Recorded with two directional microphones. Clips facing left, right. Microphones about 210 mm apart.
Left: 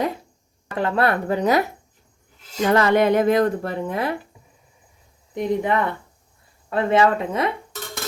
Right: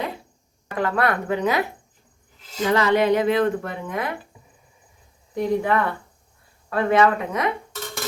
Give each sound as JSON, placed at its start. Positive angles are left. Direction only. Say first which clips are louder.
{"t": 0.8, "sound": "speech", "louder": "left 2 dB", "side_deg": 25}
{"t": 2.6, "sound": "speech", "louder": "left 2 dB", "side_deg": 50}
{"t": 5.3, "sound": "speech", "louder": "even", "side_deg": 20}